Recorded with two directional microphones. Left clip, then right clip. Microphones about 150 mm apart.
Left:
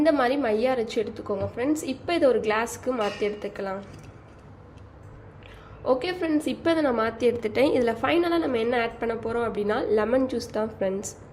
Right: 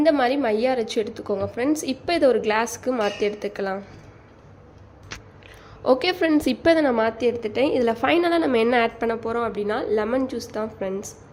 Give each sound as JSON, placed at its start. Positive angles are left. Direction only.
{"t": 0.0, "sound": "a woman's voice", "side_deg": -10}
{"t": 5.8, "sound": "a woman's voice", "side_deg": -30}
{"t": 6.6, "sound": "a woman's voice", "side_deg": -20}
{"t": 8.0, "sound": "a woman's voice", "side_deg": -20}